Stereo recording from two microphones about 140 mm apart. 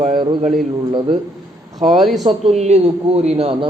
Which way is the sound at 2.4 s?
50° right (ahead or behind).